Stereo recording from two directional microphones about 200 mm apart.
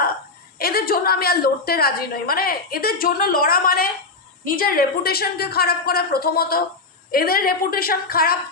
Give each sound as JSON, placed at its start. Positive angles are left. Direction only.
{"t": 0.6, "sound": "a woman's voice", "side_deg": 50}